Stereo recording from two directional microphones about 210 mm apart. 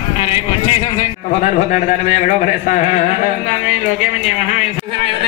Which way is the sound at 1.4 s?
35° left (ahead or behind).